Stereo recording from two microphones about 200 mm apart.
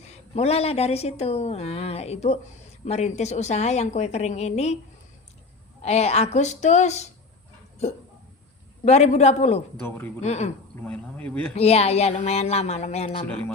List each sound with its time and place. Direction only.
0.1 s a woman's voice: 30° left (ahead or behind)
5.8 s a woman's voice: 35° left (ahead or behind)
8.8 s a woman's voice: 35° left (ahead or behind)
10.8 s speech: 5° left (ahead or behind)
11.5 s a woman's voice: 30° left (ahead or behind)
13.2 s speech: 5° left (ahead or behind)